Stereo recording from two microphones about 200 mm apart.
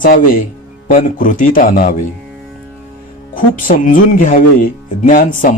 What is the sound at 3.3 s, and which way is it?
Speech, 45° left (ahead or behind).